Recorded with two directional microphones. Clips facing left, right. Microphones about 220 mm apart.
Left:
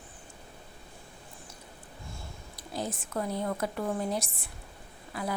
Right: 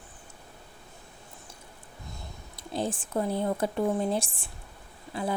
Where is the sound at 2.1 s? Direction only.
25° right (ahead or behind).